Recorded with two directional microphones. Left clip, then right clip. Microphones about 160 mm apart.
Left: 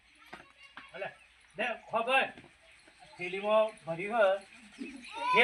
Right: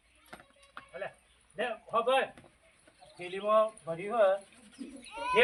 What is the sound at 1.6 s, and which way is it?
Speech, centre (ahead or behind).